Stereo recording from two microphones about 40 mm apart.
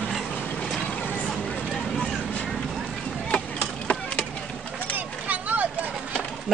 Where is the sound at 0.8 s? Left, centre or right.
Left.